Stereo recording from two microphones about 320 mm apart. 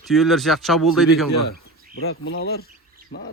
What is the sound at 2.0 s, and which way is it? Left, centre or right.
Speech, left.